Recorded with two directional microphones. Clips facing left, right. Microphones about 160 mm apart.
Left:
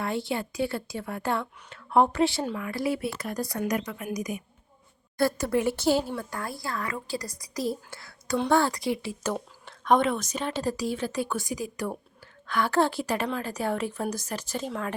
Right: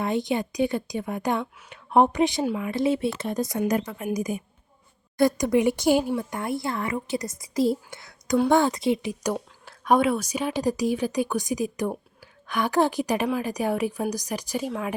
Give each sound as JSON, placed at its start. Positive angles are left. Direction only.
{"t": 0.0, "sound": "a woman's voice", "side_deg": -20}
{"t": 5.1, "sound": "a woman's voice", "side_deg": -15}
{"t": 9.3, "sound": "a woman's voice", "side_deg": -5}